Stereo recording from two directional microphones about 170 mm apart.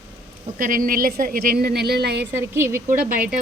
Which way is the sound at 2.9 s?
55° right (ahead or behind).